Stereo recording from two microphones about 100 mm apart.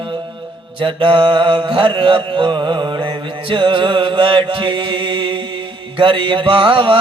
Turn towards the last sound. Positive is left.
turn(degrees=-55)  # may be behind; listen again after turning